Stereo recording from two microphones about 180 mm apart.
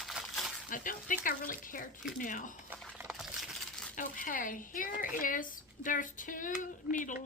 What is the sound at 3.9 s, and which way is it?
Speech, 50° left (ahead or behind).